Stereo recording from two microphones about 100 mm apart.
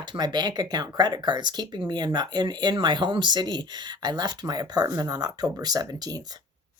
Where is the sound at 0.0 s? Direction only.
45° right (ahead or behind).